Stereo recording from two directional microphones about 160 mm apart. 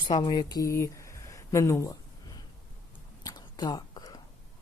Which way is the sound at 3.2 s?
25° left (ahead or behind).